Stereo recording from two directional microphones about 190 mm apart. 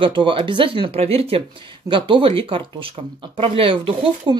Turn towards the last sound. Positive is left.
turn(degrees=-25)  # may be behind; listen again after turning